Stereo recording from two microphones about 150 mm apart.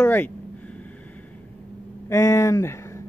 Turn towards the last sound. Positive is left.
turn(degrees=20)  # may be behind; listen again after turning